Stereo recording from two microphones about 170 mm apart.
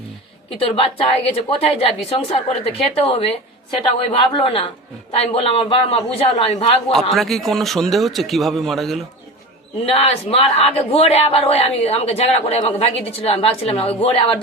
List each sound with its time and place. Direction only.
0.6 s speech: 35° left (ahead or behind)
6.9 s a man's voice: centre (ahead or behind)
9.8 s speech: 35° left (ahead or behind)